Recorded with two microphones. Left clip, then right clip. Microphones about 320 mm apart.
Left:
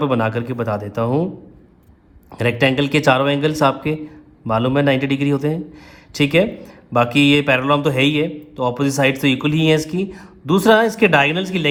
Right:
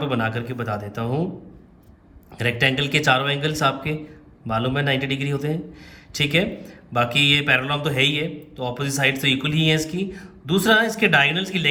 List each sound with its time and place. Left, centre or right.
0.0 s speech: left
2.3 s speech: left